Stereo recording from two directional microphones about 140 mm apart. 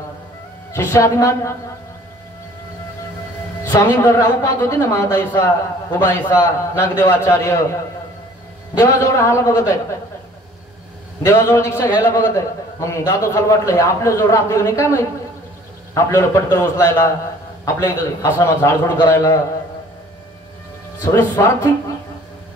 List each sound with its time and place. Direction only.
0.7 s a woman's voice: 20° left (ahead or behind)
3.6 s a woman's voice: 30° left (ahead or behind)
8.7 s a woman's voice: 20° left (ahead or behind)
11.2 s a woman's voice: 20° left (ahead or behind)
21.0 s a woman's voice: 20° left (ahead or behind)